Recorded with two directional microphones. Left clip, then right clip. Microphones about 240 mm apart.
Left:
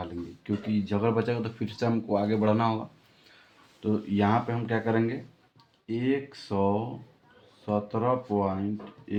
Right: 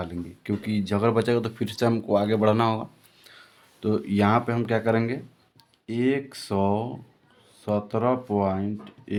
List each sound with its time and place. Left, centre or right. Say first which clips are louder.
0.0 s speech: right 3 dB; right